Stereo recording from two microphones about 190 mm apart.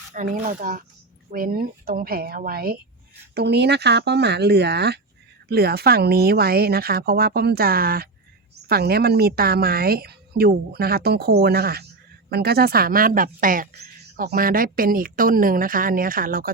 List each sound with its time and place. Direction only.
0.1 s a woman's voice: 40° right (ahead or behind)